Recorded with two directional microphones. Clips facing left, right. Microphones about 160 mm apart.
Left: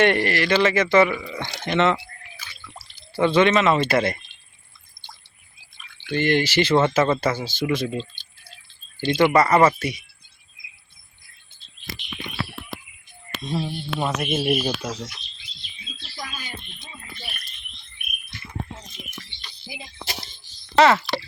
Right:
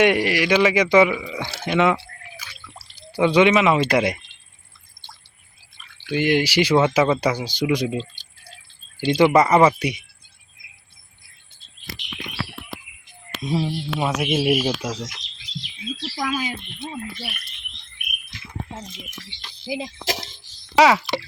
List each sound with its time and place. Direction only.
0.0 s speech: 10° right (ahead or behind)
2.4 s a sound: 10° right (ahead or behind)
5.7 s speech: 10° right (ahead or behind)
9.0 s speech: 5° right (ahead or behind)
9.4 s speech: 20° right (ahead or behind)
13.4 s speech: 10° right (ahead or behind)
15.1 s bird: 90° right
19.3 s speech: 90° right
20.7 s speech: 10° right (ahead or behind)